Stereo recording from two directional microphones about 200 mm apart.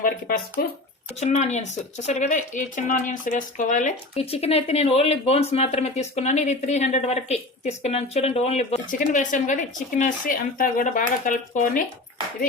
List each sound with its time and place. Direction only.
0.0 s speech: 45° left (ahead or behind)